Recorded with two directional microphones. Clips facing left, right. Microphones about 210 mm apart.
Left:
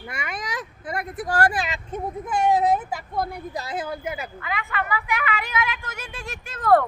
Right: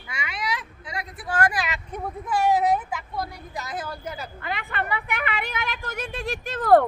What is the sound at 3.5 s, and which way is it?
Speech, 30° left (ahead or behind).